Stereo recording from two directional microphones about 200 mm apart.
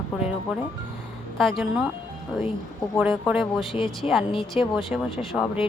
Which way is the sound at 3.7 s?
25° left (ahead or behind).